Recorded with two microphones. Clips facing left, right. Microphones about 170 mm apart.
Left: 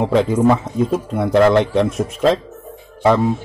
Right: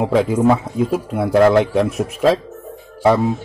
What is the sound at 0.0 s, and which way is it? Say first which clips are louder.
A man's voice: even; 5° right (ahead or behind).